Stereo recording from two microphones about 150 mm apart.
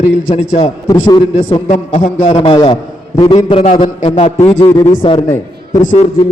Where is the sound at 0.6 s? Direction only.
25° left (ahead or behind).